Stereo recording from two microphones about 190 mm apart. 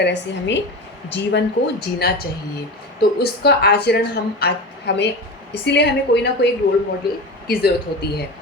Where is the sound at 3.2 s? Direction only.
60° left (ahead or behind).